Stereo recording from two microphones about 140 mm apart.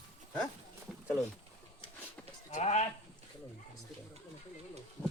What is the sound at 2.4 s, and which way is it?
Speech, 55° left (ahead or behind).